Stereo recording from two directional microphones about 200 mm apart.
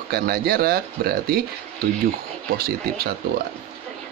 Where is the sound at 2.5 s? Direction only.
50° right (ahead or behind).